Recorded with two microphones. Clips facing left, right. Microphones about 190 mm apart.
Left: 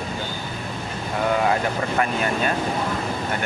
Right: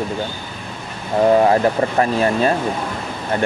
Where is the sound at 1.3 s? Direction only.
35° right (ahead or behind).